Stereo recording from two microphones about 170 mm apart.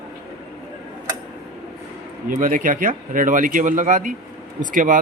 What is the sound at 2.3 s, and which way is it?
Speech, 50° right (ahead or behind).